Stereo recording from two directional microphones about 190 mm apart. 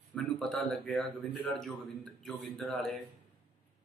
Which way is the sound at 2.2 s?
Centre (ahead or behind).